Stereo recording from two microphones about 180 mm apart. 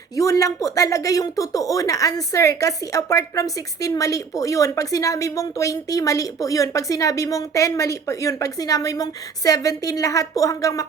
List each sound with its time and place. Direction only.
0.2 s speech: 20° left (ahead or behind)